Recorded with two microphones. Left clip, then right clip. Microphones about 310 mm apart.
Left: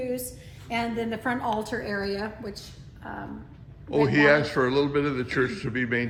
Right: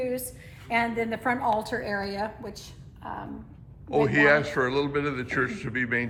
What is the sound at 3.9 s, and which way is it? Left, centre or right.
A man's voice, centre.